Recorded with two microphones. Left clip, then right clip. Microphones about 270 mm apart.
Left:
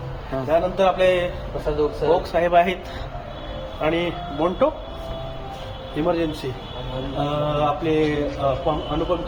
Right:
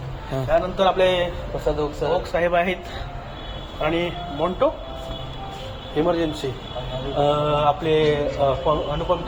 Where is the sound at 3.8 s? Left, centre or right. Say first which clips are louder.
Left 1 dB; centre.